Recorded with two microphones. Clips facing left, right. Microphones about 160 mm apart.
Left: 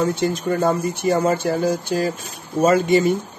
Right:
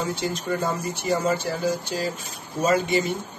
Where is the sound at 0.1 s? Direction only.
55° left (ahead or behind).